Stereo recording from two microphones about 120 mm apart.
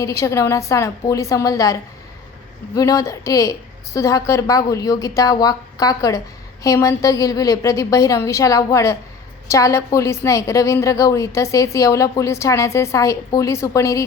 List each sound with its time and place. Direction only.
0.0 s a woman's voice: 25° left (ahead or behind)